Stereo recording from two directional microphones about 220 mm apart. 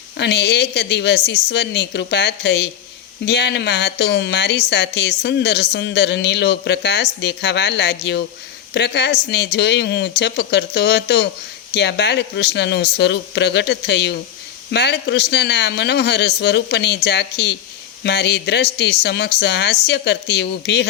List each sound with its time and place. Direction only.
0.2 s speech: 50° left (ahead or behind)